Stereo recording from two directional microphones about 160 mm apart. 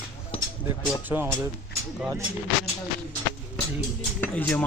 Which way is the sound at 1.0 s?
10° right (ahead or behind).